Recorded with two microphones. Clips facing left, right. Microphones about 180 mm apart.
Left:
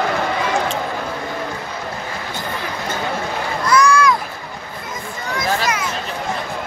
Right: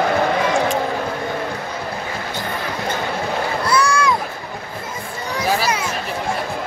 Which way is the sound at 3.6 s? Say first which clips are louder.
Left 5 dB; 30° right (ahead or behind).